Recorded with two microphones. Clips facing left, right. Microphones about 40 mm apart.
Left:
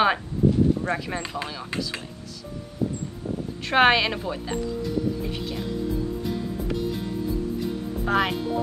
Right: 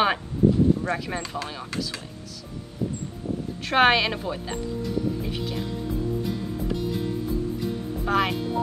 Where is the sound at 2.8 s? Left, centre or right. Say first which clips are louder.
Left 2 dB; left.